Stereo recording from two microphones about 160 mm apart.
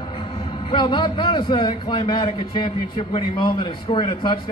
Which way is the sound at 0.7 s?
30° left (ahead or behind).